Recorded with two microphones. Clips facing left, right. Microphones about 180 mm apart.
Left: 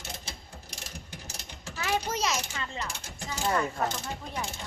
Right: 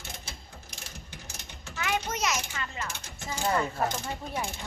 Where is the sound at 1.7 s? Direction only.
35° left (ahead or behind).